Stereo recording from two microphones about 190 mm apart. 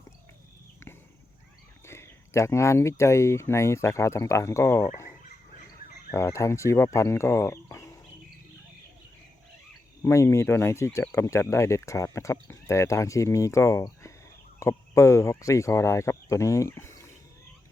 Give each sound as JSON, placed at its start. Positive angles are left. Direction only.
{"t": 1.9, "sound": "speech", "side_deg": 15}
{"t": 6.1, "sound": "speech", "side_deg": 15}
{"t": 10.0, "sound": "speech", "side_deg": 15}